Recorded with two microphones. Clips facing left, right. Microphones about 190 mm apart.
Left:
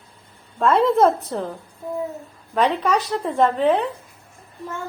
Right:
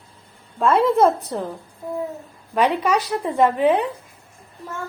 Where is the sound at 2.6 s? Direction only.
15° right (ahead or behind).